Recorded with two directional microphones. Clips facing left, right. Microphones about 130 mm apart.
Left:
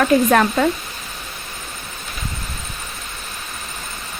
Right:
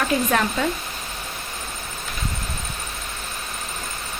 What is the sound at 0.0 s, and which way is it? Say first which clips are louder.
Speech: left 7 dB; 55° left (ahead or behind).